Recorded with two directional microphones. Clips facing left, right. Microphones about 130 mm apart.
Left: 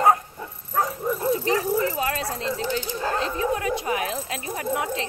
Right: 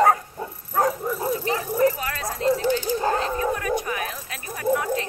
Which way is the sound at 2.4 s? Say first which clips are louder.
Right 8 dB; 45° right (ahead or behind).